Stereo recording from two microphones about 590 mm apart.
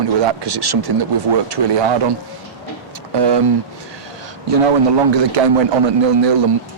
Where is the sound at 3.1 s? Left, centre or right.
Right.